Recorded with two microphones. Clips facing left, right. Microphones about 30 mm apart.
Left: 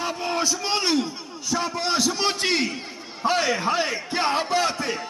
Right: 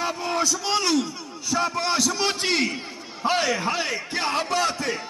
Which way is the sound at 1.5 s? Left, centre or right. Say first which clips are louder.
Right 1 dB; centre.